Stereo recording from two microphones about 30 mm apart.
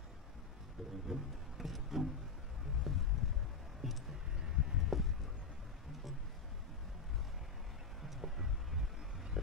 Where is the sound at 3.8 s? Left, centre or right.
Centre.